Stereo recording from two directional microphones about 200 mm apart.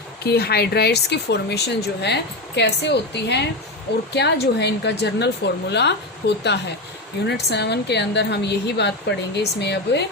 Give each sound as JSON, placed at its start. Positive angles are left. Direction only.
{"t": 0.2, "sound": "speech", "side_deg": 55}